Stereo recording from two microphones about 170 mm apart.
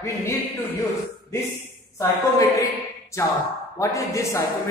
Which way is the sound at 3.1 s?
15° left (ahead or behind).